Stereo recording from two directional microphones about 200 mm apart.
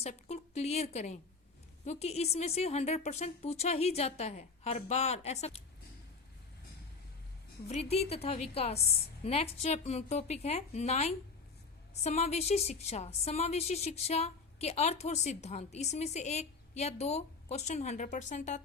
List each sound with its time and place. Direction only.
0.0 s a woman's voice: 35° left (ahead or behind)
7.7 s a woman's voice: 30° left (ahead or behind)